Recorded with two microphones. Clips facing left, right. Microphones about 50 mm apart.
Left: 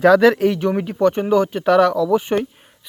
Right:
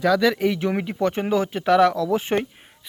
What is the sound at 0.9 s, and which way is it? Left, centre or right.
Speech, centre.